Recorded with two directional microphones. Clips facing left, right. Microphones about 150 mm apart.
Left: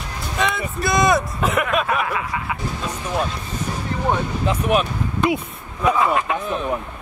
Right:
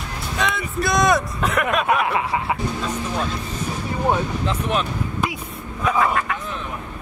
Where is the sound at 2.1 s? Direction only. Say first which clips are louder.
Right 3 dB; 30° right (ahead or behind).